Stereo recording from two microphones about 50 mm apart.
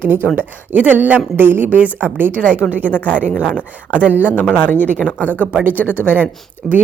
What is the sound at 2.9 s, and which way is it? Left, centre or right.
Speech, left.